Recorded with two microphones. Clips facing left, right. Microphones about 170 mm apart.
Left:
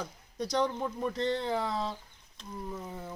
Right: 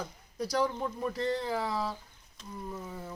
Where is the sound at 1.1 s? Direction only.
25° left (ahead or behind).